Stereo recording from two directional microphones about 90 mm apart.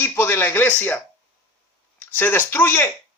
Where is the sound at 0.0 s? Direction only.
25° left (ahead or behind).